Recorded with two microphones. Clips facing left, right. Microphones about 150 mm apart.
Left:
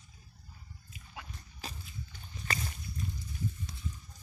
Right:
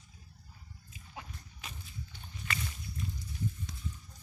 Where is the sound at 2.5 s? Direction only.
40° left (ahead or behind).